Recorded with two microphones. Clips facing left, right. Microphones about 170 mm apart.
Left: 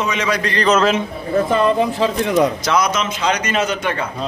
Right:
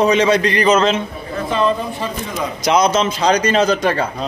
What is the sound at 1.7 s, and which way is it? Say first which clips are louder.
Speech: left 7 dB; 75° left (ahead or behind).